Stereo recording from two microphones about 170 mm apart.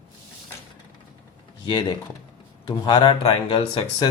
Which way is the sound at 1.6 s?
25° left (ahead or behind).